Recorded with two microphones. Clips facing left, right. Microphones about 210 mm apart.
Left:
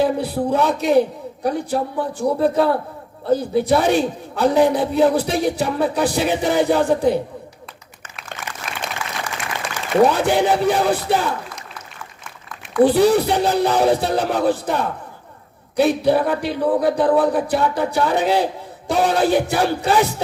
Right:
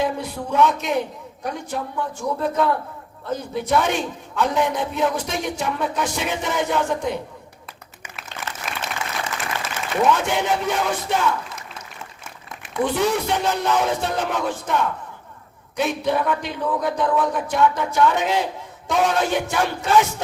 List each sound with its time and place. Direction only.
0.0 s a man's voice: 35° left (ahead or behind)
9.0 s applause: 25° right (ahead or behind)
10.0 s a man's voice: 35° left (ahead or behind)
12.8 s a man's voice: 35° left (ahead or behind)